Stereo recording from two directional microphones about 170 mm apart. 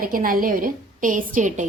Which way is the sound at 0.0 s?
55° right (ahead or behind).